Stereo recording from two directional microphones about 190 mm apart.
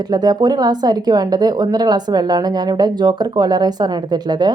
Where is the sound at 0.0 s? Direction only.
20° right (ahead or behind).